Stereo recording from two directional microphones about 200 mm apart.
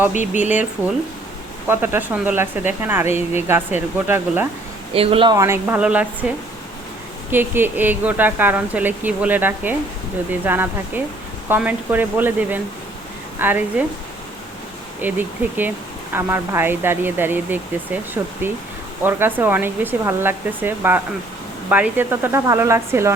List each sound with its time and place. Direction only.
0.1 s speech: 35° left (ahead or behind)
0.5 s speech: 10° right (ahead or behind)
4.9 s speech: 30° right (ahead or behind); by 6.1 s 5° right (ahead or behind)
7.3 s speech: 10° right (ahead or behind)
15.0 s speech: 10° right (ahead or behind)